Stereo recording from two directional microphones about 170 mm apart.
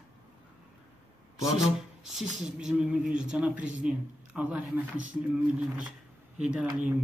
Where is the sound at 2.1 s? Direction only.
5° right (ahead or behind).